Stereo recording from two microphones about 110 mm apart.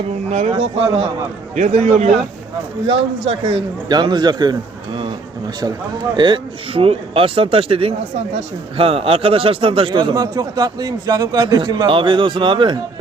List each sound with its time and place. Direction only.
0.3 s a man's voice: 80° right; by 1.1 s 65° right (ahead or behind)
1.5 s a man's voice: 85° right
2.8 s speech: 55° right (ahead or behind)
3.8 s a man's voice: 40° right (ahead or behind)
6.1 s a man's voice: 45° right (ahead or behind)
6.8 s a man's voice: 55° right (ahead or behind)